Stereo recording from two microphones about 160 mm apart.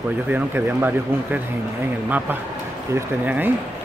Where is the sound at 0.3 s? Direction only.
15° right (ahead or behind).